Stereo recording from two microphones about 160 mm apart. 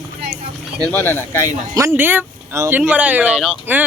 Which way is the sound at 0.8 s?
10° left (ahead or behind).